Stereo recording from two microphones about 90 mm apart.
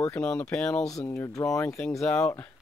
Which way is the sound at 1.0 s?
30° left (ahead or behind).